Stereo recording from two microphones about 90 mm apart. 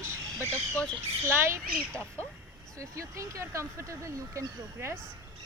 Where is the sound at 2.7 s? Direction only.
35° right (ahead or behind).